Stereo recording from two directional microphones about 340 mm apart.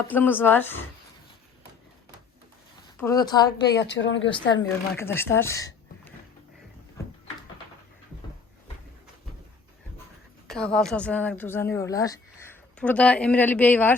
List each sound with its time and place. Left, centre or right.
0.1 s speech: centre
3.0 s speech: centre
3.8 s speech: left
4.3 s speech: centre
5.4 s a sound: centre
10.4 s a woman's voice: centre